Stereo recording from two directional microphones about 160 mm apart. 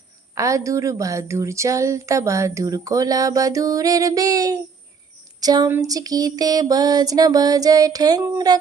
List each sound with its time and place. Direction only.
0.3 s a woman's voice: 20° right (ahead or behind)
5.4 s a sound: 25° right (ahead or behind)
5.7 s a woman's voice: 20° right (ahead or behind)